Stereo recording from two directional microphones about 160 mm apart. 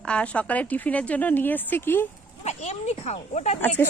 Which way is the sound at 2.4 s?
45° left (ahead or behind).